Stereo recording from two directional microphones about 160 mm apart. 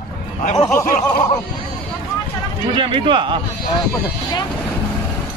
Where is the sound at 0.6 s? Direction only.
20° left (ahead or behind).